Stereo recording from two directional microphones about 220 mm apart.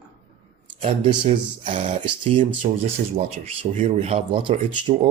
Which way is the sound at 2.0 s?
25° right (ahead or behind).